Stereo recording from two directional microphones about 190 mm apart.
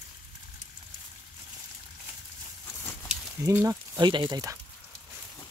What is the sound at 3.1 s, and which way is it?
Speech, 10° right (ahead or behind).